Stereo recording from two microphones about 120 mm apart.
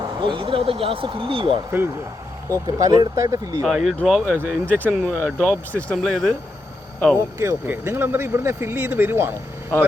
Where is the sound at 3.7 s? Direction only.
5° right (ahead or behind).